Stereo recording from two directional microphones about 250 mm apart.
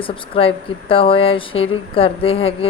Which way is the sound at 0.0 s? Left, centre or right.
Left.